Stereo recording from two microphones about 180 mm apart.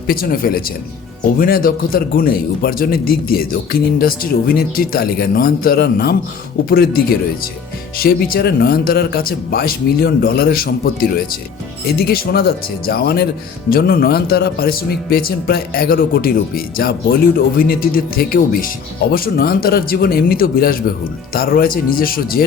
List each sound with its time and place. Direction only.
0.1 s speech: 55° left (ahead or behind)
11.9 s speech: 60° left (ahead or behind)